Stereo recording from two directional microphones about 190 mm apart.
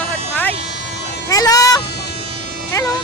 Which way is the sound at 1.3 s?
20° left (ahead or behind).